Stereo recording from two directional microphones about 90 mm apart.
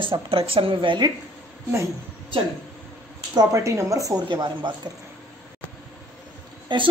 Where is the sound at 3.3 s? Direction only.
45° right (ahead or behind).